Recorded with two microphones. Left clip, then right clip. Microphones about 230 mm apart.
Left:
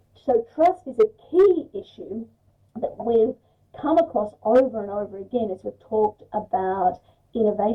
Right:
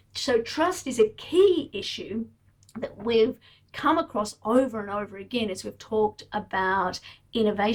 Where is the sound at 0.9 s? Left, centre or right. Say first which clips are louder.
Left 2 dB; right.